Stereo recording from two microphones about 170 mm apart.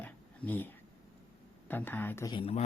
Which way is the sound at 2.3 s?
35° left (ahead or behind).